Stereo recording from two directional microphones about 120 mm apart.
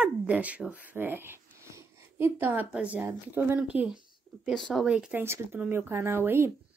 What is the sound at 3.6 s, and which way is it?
Speech, 10° right (ahead or behind).